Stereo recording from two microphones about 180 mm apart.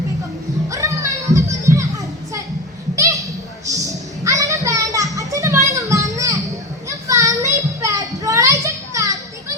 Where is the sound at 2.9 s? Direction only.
20° right (ahead or behind).